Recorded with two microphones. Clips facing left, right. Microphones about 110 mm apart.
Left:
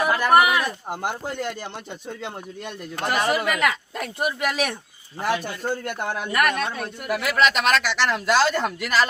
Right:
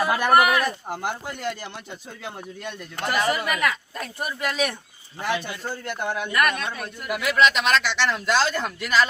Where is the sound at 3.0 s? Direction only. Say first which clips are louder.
Left 1 dB; 30° left (ahead or behind).